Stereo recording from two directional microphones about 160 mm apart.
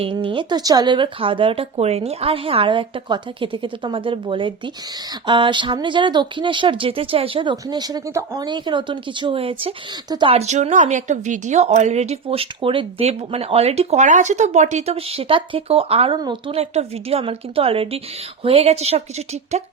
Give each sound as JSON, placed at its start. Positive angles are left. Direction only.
{"t": 0.0, "sound": "speech", "side_deg": -35}